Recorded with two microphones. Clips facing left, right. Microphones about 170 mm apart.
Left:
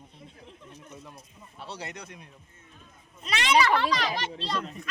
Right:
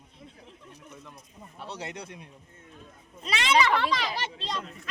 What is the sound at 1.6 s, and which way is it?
Speech, 20° right (ahead or behind).